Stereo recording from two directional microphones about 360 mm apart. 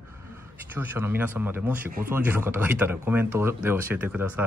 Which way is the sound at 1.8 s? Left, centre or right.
Right.